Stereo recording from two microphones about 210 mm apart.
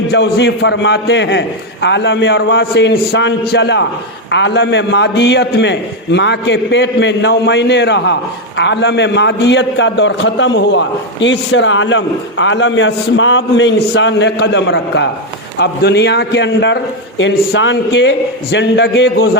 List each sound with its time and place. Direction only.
0.1 s a man's voice: 55° left (ahead or behind)